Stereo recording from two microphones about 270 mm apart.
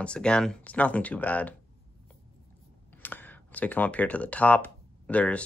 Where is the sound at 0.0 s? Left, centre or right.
Centre.